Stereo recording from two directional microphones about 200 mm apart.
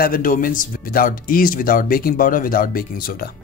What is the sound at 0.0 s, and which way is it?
Speech, 45° left (ahead or behind).